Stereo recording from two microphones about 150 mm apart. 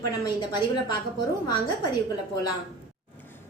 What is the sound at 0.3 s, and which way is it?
Speech, 30° left (ahead or behind).